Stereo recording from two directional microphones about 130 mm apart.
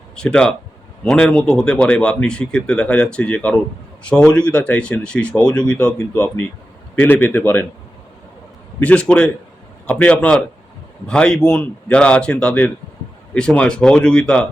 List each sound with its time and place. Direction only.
0.2 s speech: 5° left (ahead or behind)
8.8 s speech: 10° left (ahead or behind)